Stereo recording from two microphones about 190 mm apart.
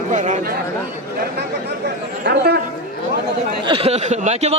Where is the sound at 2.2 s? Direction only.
60° right (ahead or behind).